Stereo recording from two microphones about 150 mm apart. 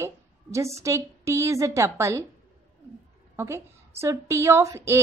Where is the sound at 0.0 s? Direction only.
20° right (ahead or behind).